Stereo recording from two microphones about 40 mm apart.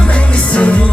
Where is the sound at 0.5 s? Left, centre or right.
Left.